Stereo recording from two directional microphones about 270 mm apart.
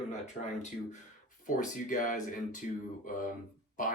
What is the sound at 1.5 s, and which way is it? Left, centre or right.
Speech, left.